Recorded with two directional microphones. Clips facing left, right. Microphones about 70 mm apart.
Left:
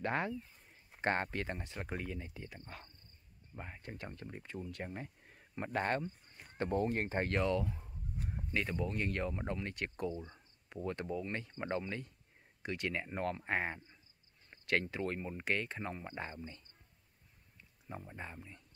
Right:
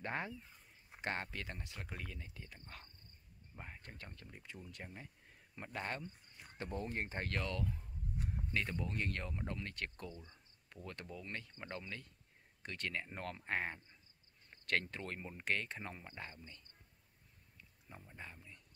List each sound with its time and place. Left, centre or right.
0.0 s speech: left
1.0 s speech: left
2.7 s speech: centre
4.3 s speech: left
7.2 s speech: left; by 9.4 s centre
9.5 s speech: left
10.1 s speech: left
10.9 s speech: left
12.6 s speech: centre
16.0 s speech: left
17.8 s speech: left